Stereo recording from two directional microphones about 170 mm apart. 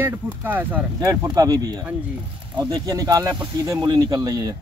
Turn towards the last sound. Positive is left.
turn(degrees=-25)  # may be behind; listen again after turning